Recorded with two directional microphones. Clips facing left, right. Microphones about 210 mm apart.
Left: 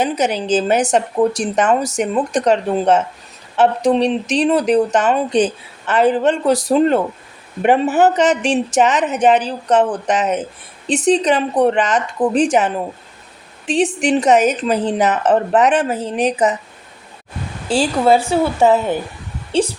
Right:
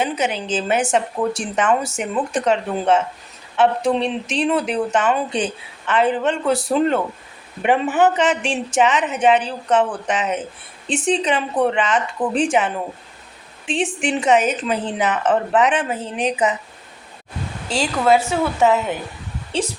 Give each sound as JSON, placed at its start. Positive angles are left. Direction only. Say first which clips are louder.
{"t": 0.0, "sound": "speech", "louder": "left 4 dB", "side_deg": 40}
{"t": 17.7, "sound": "speech", "louder": "left 3 dB", "side_deg": 30}